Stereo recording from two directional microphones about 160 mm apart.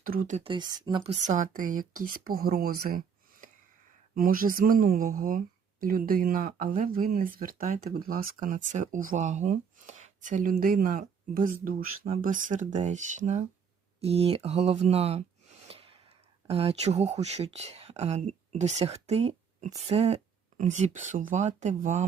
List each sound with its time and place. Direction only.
0.0 s speech: 60° right (ahead or behind)
0.3 s speech: 30° right (ahead or behind)
1.2 s speech: 50° right (ahead or behind)